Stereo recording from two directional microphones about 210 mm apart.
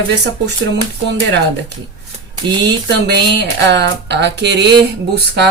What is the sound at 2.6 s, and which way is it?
Speech, 55° right (ahead or behind).